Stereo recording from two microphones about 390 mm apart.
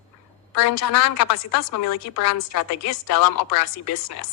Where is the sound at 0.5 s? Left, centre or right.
Left.